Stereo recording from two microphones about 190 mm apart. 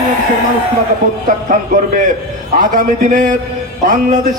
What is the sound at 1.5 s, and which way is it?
A man's voice, 45° right (ahead or behind).